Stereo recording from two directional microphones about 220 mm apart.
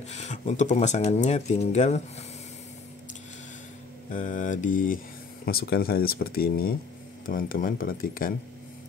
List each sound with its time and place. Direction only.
0.1 s speech: 30° left (ahead or behind)
4.1 s speech: 35° left (ahead or behind)